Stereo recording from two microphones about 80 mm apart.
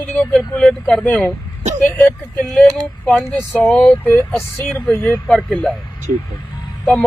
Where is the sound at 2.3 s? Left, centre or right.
Centre; by 5.1 s left.